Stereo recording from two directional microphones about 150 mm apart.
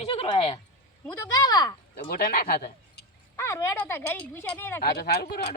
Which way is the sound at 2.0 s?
90° left.